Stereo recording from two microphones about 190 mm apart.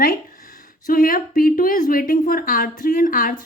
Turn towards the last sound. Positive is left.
turn(degrees=50)  # may be behind; listen again after turning